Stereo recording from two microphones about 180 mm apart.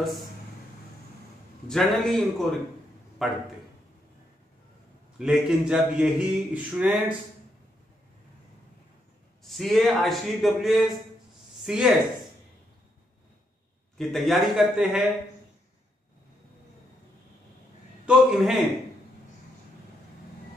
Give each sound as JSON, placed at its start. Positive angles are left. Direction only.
{"t": 1.7, "sound": "speech", "side_deg": 0}
{"t": 5.2, "sound": "speech", "side_deg": 0}
{"t": 9.4, "sound": "speech", "side_deg": 0}
{"t": 13.9, "sound": "speech", "side_deg": 0}
{"t": 18.0, "sound": "speech", "side_deg": 0}